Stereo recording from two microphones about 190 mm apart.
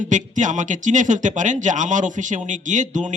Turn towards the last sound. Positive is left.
turn(degrees=-40)  # may be behind; listen again after turning